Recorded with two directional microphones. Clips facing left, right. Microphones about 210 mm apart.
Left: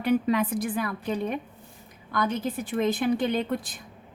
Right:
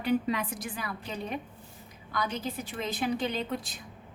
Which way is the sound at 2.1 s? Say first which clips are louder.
Left 5 dB; 50° left (ahead or behind).